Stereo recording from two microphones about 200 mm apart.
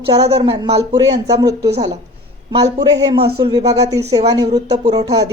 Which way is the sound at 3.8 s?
15° right (ahead or behind).